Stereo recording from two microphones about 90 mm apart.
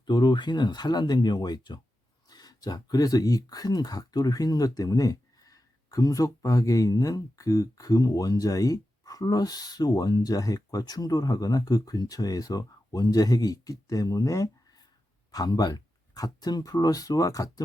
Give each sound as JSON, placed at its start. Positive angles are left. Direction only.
{"t": 0.0, "sound": "speech", "side_deg": 55}